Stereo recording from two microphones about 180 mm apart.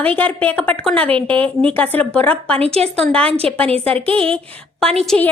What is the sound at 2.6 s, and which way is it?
Speech, 35° right (ahead or behind).